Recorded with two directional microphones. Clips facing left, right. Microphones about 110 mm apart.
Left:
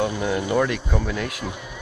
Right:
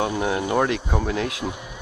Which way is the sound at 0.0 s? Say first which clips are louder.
Even; 30° right (ahead or behind).